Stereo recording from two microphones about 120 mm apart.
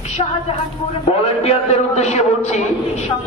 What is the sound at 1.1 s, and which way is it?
A man's voice, 65° left (ahead or behind).